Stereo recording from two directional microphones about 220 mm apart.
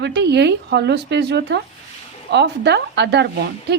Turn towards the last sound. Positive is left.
turn(degrees=-50)  # may be behind; listen again after turning